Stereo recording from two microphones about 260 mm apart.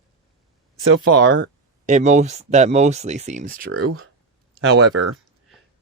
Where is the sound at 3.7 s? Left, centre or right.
Right.